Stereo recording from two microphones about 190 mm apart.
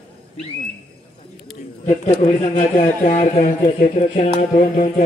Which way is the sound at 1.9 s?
40° left (ahead or behind).